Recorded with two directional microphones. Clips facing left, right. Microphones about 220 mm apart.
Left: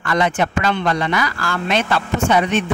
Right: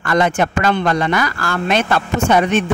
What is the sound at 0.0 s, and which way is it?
A man's voice, 45° right (ahead or behind).